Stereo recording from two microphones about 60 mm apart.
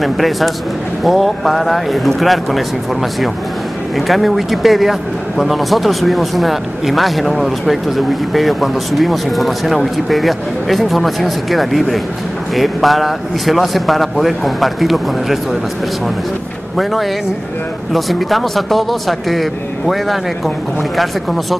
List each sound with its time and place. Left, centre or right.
0.0 s speech: centre
16.7 s speech: centre